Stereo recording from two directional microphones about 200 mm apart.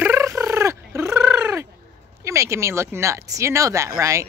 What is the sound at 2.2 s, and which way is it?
Speech, 15° right (ahead or behind).